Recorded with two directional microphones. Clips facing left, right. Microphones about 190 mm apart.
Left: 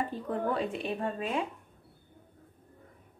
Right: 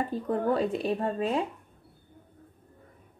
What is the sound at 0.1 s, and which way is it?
A woman's voice, 40° right (ahead or behind).